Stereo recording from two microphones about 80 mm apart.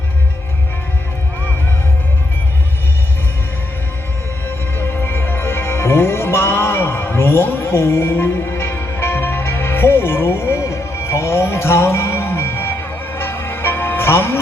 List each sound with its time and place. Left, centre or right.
4.4 s music: left